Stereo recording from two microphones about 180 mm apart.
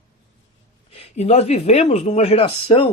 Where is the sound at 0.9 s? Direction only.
35° left (ahead or behind).